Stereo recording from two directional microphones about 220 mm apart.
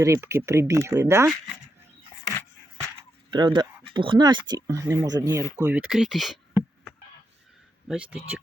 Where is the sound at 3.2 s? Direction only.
20° right (ahead or behind); by 6.4 s centre (ahead or behind).